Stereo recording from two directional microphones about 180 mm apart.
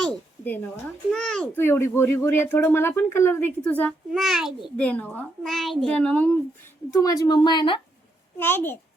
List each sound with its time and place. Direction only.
0.1 s a sound: 10° left (ahead or behind)
1.1 s a child's voice: 5° left (ahead or behind)
6.9 s a woman's voice: 20° left (ahead or behind)
8.4 s a child's voice: 10° left (ahead or behind)